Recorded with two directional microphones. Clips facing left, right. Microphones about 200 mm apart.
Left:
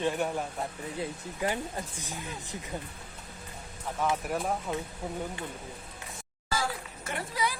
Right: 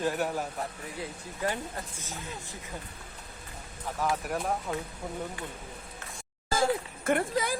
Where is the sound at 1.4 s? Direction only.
15° left (ahead or behind).